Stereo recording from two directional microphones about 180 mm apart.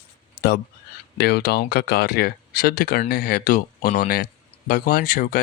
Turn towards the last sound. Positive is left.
turn(degrees=50)  # may be behind; listen again after turning